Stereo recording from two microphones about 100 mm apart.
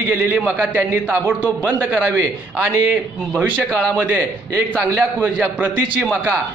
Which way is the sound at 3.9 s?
15° right (ahead or behind).